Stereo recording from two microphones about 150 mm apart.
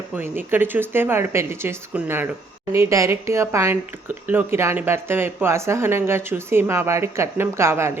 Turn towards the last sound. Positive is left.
turn(degrees=-15)  # may be behind; listen again after turning